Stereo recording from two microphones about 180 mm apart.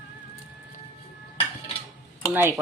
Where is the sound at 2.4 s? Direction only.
10° right (ahead or behind).